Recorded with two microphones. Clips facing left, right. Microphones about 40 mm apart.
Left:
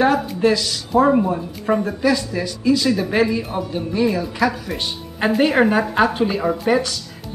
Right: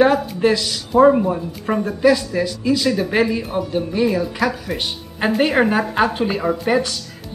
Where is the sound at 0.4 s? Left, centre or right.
Centre.